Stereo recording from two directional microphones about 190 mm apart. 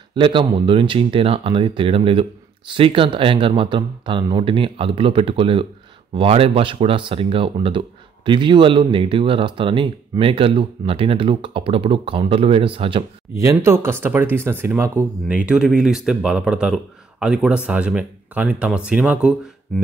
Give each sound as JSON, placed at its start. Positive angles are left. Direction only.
{"t": 0.1, "sound": "speech", "side_deg": -25}
{"t": 13.4, "sound": "speech", "side_deg": -15}